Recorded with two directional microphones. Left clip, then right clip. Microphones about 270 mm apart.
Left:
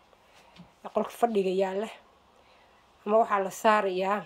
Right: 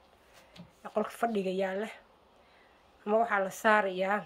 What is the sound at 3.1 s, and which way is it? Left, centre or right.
A woman's voice, centre.